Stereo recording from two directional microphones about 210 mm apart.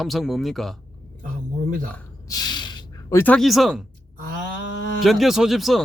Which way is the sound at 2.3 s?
20° left (ahead or behind).